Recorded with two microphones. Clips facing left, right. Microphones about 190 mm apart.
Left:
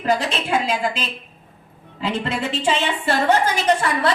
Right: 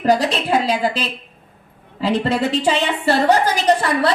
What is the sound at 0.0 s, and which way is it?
A woman's voice, 35° right (ahead or behind).